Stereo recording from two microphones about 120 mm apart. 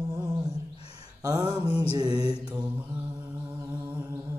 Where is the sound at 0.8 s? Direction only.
55° left (ahead or behind).